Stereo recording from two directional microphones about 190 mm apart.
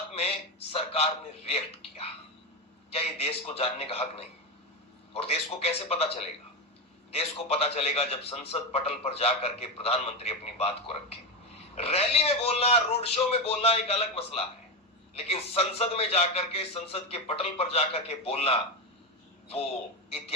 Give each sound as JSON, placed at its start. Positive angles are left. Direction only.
{"t": 0.1, "sound": "a man's voice", "side_deg": 30}
{"t": 7.1, "sound": "a man's voice", "side_deg": 30}
{"t": 20.1, "sound": "speech", "side_deg": 30}